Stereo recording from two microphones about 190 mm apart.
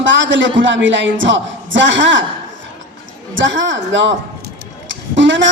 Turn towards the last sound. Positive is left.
turn(degrees=-75)  # may be behind; listen again after turning